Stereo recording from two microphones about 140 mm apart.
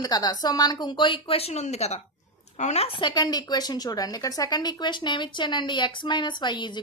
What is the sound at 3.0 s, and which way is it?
A woman's voice, 30° left (ahead or behind).